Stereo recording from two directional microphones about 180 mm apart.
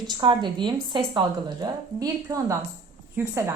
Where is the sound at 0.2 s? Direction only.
25° right (ahead or behind).